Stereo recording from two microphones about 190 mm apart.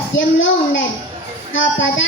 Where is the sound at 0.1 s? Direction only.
80° left.